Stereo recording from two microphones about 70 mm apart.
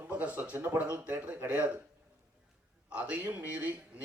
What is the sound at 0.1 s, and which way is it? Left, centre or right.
A man's voice, right.